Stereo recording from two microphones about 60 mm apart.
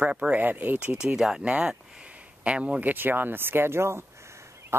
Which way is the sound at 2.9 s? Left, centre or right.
Right.